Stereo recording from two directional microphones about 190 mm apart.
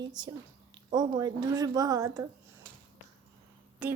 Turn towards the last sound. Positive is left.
turn(degrees=-5)  # may be behind; listen again after turning